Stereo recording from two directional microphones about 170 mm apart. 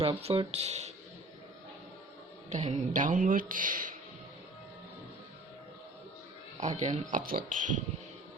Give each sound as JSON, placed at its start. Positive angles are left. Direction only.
{"t": 0.0, "sound": "speech", "side_deg": -35}
{"t": 2.5, "sound": "speech", "side_deg": -40}
{"t": 6.6, "sound": "speech", "side_deg": -45}